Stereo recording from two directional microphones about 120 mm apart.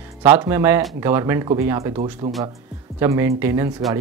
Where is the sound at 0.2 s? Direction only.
20° right (ahead or behind).